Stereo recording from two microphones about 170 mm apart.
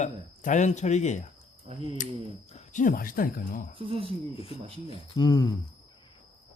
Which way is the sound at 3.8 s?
30° right (ahead or behind).